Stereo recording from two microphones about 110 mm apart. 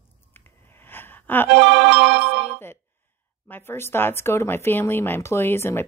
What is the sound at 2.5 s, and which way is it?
Speech, 20° left (ahead or behind).